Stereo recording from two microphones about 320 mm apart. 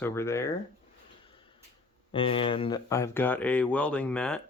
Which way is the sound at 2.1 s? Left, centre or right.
Centre.